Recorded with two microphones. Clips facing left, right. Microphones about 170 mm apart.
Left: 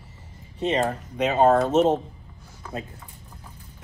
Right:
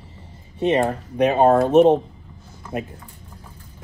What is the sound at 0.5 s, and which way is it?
Speech, 15° right (ahead or behind).